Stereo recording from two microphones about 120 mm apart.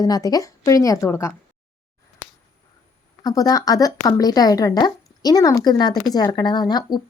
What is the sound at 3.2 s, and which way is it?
Speech, 30° left (ahead or behind).